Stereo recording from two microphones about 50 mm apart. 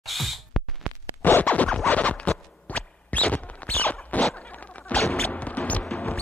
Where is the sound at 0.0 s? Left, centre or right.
Centre.